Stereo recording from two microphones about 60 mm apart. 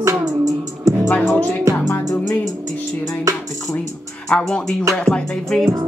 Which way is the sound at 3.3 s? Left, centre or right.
Right.